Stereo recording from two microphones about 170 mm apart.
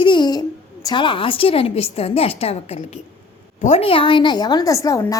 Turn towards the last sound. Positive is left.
turn(degrees=20)  # may be behind; listen again after turning